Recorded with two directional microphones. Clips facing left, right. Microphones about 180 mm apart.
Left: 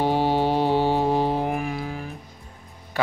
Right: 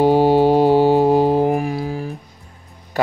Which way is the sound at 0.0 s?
40° right (ahead or behind).